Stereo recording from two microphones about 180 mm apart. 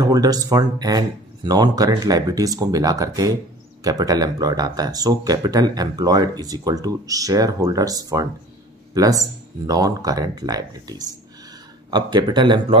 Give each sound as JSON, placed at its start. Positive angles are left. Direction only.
{"t": 0.0, "sound": "speech", "side_deg": -20}